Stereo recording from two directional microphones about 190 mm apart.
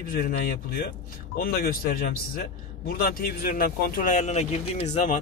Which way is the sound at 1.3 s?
50° left (ahead or behind).